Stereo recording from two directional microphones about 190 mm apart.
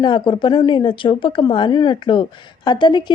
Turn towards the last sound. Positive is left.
turn(degrees=25)  # may be behind; listen again after turning